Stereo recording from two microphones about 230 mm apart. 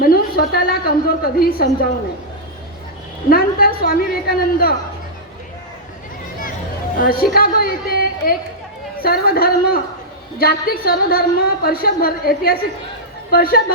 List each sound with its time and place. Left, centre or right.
0.0 s a woman's voice: left
3.2 s a woman's voice: left
7.0 s a woman's voice: left
7.3 s chatter: left
9.0 s a woman's voice: left